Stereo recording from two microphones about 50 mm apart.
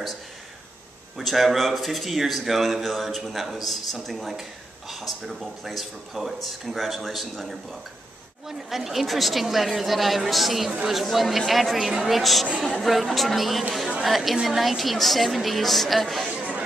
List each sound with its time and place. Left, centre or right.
1.1 s a man's voice: centre
16.3 s chatter: right